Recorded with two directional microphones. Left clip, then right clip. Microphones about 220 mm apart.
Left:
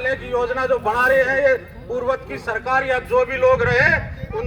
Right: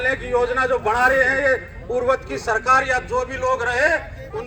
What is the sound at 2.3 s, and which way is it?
A man's voice, 50° right (ahead or behind).